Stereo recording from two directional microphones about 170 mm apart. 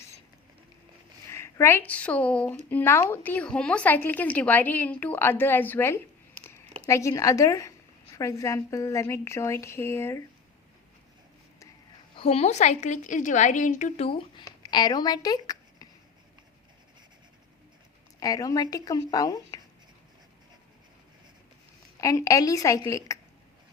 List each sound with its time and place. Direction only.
1.3 s a woman's voice: 15° left (ahead or behind)
12.1 s a woman's voice: 35° left (ahead or behind)
18.2 s speech: 20° left (ahead or behind)
22.0 s speech: 20° left (ahead or behind)